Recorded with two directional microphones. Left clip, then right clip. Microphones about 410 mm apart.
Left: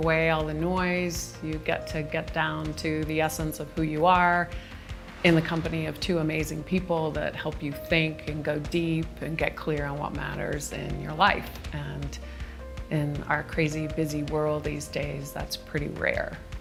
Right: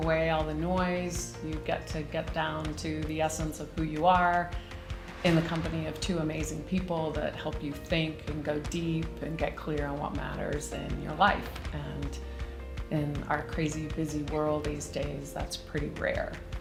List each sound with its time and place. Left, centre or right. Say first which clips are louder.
0.0 s speech: left 4 dB; left
12.9 s speech: left 3 dB; left